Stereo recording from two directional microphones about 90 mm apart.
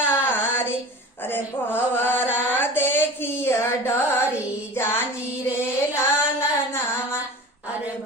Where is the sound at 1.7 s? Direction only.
25° left (ahead or behind).